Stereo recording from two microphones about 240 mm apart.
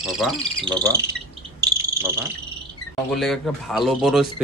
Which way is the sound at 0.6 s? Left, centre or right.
Centre.